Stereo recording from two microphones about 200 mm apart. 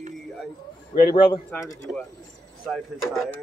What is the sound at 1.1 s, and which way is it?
Speech, 25° left (ahead or behind).